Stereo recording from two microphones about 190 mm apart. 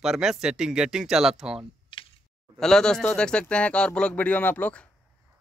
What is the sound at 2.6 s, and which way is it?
Speech, 5° left (ahead or behind).